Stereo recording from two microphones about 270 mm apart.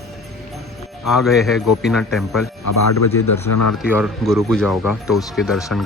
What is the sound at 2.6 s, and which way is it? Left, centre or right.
Speech, left.